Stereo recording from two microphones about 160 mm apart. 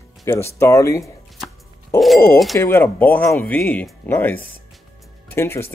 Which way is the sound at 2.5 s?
20° left (ahead or behind).